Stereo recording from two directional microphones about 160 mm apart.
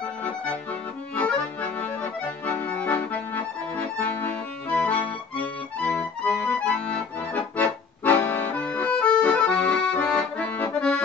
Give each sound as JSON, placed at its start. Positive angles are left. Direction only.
{"t": 1.1, "sound": "accordion", "side_deg": 10}